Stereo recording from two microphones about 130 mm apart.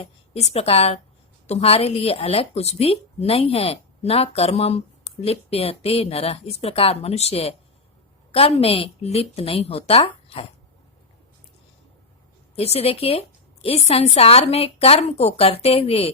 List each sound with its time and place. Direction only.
0.0 s a woman's voice: 50° left (ahead or behind)
12.5 s a woman's voice: 50° left (ahead or behind)